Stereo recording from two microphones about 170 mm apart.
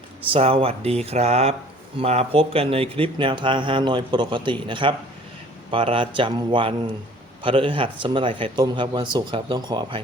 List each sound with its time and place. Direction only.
0.3 s speech: 35° right (ahead or behind)